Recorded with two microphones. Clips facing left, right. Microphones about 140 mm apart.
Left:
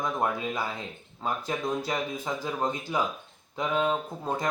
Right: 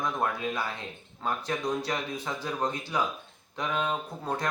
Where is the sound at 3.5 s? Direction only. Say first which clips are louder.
Left 3 dB; 5° left (ahead or behind).